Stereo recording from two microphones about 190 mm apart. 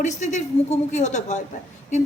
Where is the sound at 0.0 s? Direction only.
40° left (ahead or behind).